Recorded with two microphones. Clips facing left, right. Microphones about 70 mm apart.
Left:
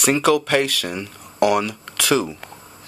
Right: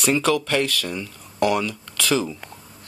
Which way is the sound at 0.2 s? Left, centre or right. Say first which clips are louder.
Left 4 dB; left.